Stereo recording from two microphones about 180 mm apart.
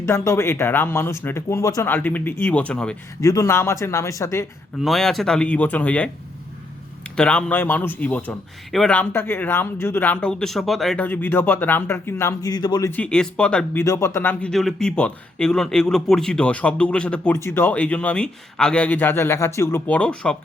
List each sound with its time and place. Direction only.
0.0 s speech: 15° left (ahead or behind)
3.2 s speech: 20° left (ahead or behind)
4.8 s speech: centre (ahead or behind)
7.2 s speech: 5° left (ahead or behind); by 12.9 s 20° left (ahead or behind)
12.9 s speech: 5° left (ahead or behind)
13.8 s speech: 15° left (ahead or behind)